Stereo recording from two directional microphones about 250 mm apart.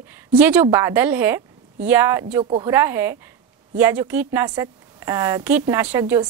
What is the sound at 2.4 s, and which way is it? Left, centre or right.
Speech, right.